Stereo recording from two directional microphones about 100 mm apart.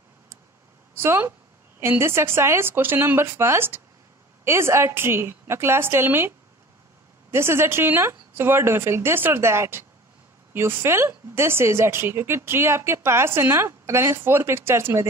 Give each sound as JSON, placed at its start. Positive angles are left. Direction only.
{"t": 0.9, "sound": "speech", "side_deg": -20}